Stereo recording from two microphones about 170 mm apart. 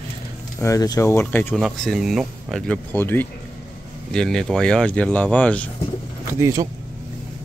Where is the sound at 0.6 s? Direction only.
20° left (ahead or behind).